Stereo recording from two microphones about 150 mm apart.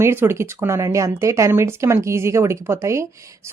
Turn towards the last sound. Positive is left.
turn(degrees=-20)  # may be behind; listen again after turning